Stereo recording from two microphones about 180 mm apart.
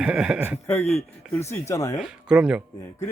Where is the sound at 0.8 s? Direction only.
35° left (ahead or behind).